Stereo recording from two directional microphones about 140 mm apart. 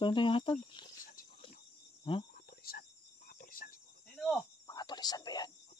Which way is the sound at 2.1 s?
35° left (ahead or behind).